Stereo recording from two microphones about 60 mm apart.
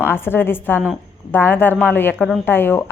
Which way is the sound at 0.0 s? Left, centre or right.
Left.